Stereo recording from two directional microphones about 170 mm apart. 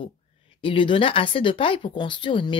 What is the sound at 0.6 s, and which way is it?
Speech, 30° left (ahead or behind).